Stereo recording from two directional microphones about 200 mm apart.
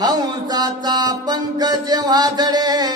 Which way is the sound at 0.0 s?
20° right (ahead or behind).